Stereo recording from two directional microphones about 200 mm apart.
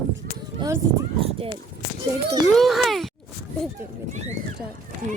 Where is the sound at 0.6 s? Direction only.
15° right (ahead or behind).